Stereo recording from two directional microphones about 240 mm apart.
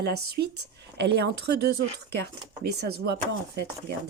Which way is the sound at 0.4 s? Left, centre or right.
Right.